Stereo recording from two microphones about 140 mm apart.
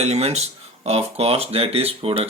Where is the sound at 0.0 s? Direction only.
50° right (ahead or behind).